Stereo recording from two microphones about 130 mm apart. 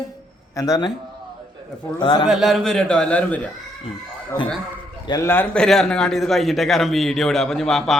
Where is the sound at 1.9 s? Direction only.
35° left (ahead or behind).